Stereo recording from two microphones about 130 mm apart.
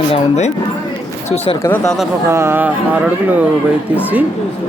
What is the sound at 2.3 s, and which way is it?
Speech, 20° right (ahead or behind).